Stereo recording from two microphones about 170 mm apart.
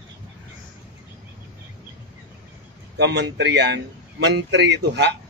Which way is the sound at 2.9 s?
85° right.